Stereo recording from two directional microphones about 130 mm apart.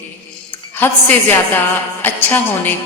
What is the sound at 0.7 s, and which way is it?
Music, 15° left (ahead or behind).